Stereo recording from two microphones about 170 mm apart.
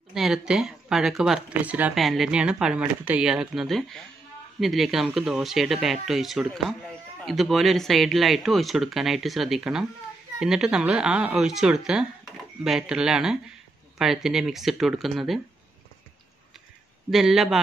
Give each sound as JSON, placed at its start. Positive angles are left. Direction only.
{"t": 0.1, "sound": "speech", "side_deg": -5}
{"t": 17.1, "sound": "speech", "side_deg": 0}